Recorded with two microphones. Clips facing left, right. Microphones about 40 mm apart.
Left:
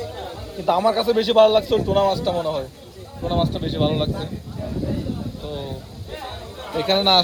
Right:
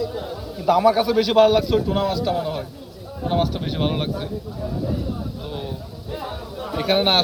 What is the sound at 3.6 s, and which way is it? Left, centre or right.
Speech, centre.